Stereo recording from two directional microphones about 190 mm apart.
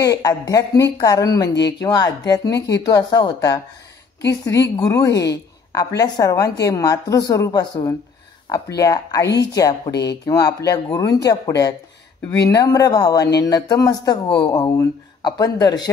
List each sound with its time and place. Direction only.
0.0 s speech: 15° left (ahead or behind)
4.7 s speech: 15° left (ahead or behind)